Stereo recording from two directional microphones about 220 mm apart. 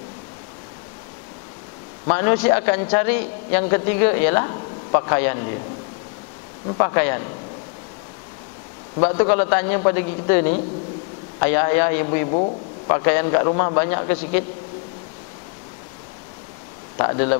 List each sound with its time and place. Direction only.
2.0 s a man's voice: 15° left (ahead or behind)
6.8 s a man's voice: 15° left (ahead or behind)
9.0 s a man's voice: 20° left (ahead or behind)
12.3 s a man's voice: 35° left (ahead or behind)
12.8 s a man's voice: 15° left (ahead or behind)
16.9 s speech: 20° left (ahead or behind)